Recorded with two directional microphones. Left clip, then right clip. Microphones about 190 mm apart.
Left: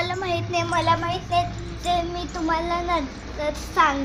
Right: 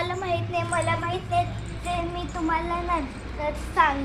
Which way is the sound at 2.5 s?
20° left (ahead or behind).